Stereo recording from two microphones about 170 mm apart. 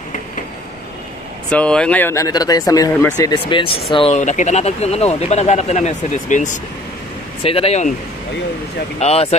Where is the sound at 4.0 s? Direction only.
40° left (ahead or behind).